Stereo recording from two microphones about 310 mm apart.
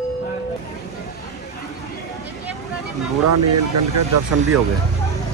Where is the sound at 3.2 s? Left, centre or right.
Right.